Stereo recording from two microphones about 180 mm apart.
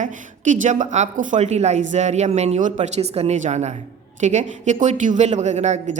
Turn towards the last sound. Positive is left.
turn(degrees=-40)  # may be behind; listen again after turning